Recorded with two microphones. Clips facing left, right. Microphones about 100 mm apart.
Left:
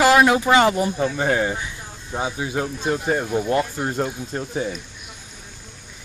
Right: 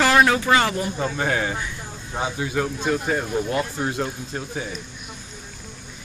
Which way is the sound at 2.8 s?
35° left (ahead or behind).